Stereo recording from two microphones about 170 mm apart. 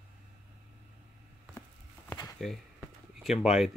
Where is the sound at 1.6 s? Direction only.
15° left (ahead or behind).